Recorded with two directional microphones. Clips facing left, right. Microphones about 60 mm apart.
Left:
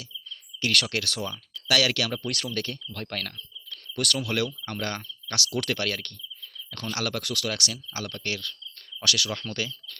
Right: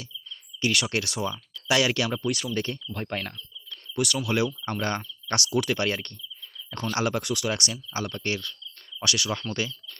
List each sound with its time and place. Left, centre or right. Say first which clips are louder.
0.6 s speech: right 1 dB; centre
2.2 s speech: right 4 dB; centre
2.9 s speech: right 3 dB; right
3.9 s speech: right 2 dB; centre
4.7 s speech: right 3 dB; right
5.7 s cricket: right 3 dB; right
6.9 s speech: right 4 dB; right